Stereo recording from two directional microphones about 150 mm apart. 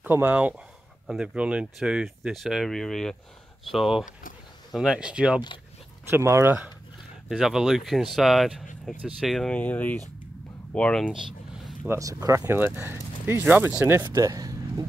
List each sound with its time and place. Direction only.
0.0 s speech: 10° right (ahead or behind)
6.0 s speech: 15° right (ahead or behind)
7.2 s speech: centre (ahead or behind)
11.1 s a sound: 5° right (ahead or behind)
11.9 s speech: 20° right (ahead or behind)